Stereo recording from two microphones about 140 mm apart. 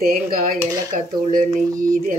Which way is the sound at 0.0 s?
90° right.